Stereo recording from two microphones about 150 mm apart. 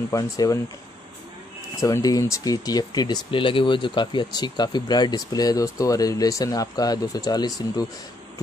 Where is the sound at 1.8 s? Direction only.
20° left (ahead or behind).